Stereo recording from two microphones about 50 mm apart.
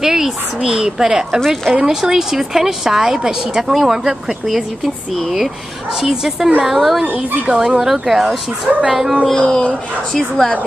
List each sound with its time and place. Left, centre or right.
0.0 s a woman's voice: centre
9.3 s speech: left
10.1 s a woman's voice: centre